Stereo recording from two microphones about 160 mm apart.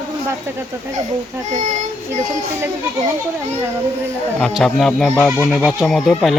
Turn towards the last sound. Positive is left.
turn(degrees=0)  # may be behind; listen again after turning